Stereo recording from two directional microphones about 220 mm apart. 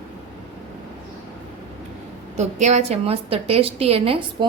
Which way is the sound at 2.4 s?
30° right (ahead or behind).